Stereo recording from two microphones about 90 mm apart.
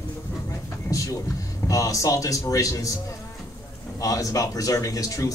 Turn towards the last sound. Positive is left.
turn(degrees=40)  # may be behind; listen again after turning